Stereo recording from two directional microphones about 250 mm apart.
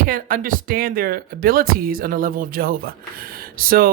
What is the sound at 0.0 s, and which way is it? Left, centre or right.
Speech, right.